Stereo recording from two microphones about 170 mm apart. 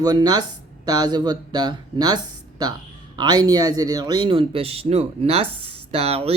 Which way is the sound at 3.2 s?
25° right (ahead or behind).